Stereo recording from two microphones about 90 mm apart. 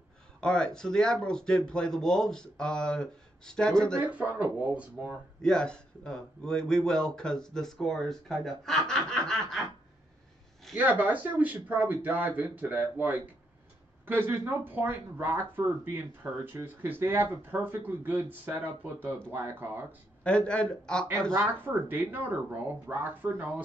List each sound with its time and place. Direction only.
0.4 s speech: 10° left (ahead or behind)
4.0 s speech: 15° right (ahead or behind)
5.4 s speech: 10° left (ahead or behind)
10.8 s speech: 15° right (ahead or behind)
20.2 s speech: 10° left (ahead or behind)
21.6 s speech: 20° right (ahead or behind)